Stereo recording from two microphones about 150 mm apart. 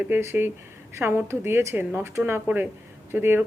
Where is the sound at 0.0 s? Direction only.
15° right (ahead or behind).